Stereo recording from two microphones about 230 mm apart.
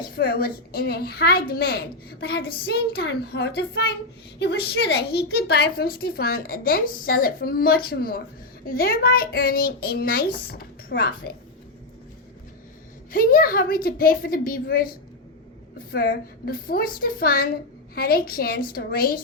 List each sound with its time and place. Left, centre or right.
0.0 s a woman's voice: left
13.1 s a woman's voice: left